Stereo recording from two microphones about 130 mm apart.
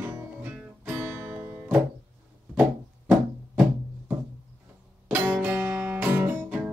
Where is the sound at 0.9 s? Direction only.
5° right (ahead or behind).